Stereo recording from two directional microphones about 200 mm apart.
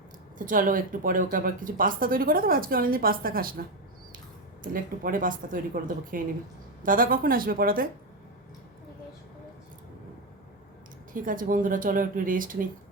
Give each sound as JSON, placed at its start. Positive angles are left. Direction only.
{"t": 0.3, "sound": "speech", "side_deg": -45}
{"t": 4.6, "sound": "speech", "side_deg": -45}
{"t": 11.1, "sound": "speech", "side_deg": -45}